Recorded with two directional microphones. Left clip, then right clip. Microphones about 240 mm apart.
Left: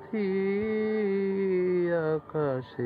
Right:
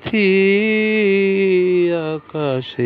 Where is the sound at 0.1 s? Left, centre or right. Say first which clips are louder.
Right 15 dB; right.